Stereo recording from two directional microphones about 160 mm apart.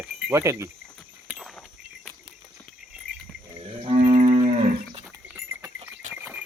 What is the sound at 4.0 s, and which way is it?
Cattle, 55° right (ahead or behind).